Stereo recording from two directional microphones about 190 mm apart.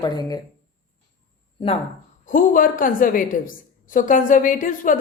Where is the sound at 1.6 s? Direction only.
25° left (ahead or behind).